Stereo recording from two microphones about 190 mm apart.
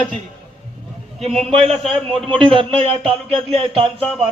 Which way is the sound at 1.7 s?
Centre (ahead or behind).